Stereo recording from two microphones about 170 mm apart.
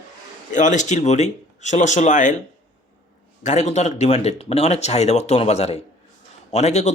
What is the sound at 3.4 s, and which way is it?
A man's voice, 45° left (ahead or behind).